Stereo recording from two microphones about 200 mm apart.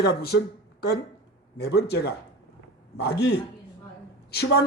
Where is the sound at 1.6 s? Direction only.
55° left (ahead or behind).